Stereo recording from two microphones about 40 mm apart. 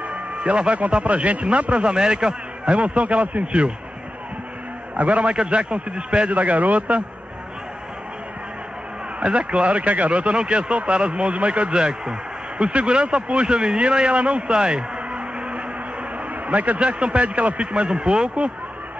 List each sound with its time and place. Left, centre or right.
0.0 s a man's voice: right
2.7 s speech: right
4.9 s speech: right
9.2 s speech: right